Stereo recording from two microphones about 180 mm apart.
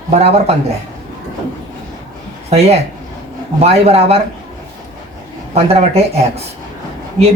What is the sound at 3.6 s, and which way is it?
Speech, 35° right (ahead or behind).